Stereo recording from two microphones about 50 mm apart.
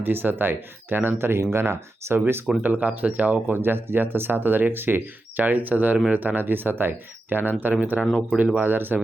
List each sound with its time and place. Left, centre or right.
0.0 s speech: right
2.6 s speech: right
3.5 s speech: right